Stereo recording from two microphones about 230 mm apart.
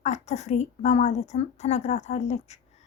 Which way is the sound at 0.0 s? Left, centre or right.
Left.